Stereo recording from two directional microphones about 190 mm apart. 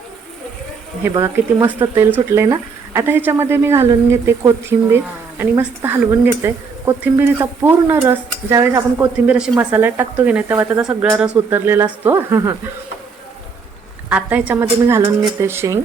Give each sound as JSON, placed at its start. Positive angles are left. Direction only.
{"t": 1.0, "sound": "speech", "side_deg": -15}
{"t": 14.1, "sound": "speech", "side_deg": -10}